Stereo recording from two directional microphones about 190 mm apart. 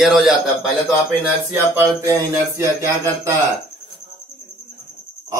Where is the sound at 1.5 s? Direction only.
10° right (ahead or behind).